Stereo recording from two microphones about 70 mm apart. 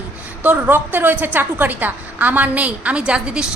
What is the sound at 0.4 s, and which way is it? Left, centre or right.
A woman's voice, right.